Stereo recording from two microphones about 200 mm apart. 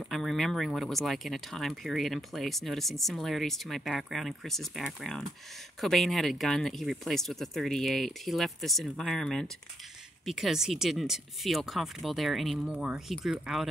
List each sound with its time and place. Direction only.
0.1 s speech: centre (ahead or behind)